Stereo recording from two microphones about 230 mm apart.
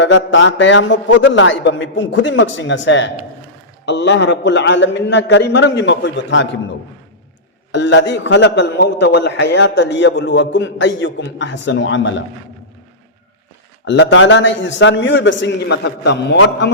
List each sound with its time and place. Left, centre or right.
0.0 s a man's voice: left
7.7 s a man's voice: left
13.8 s a man's voice: left